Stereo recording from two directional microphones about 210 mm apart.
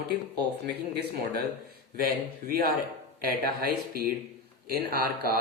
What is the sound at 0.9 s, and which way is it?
Speech, 50° right (ahead or behind).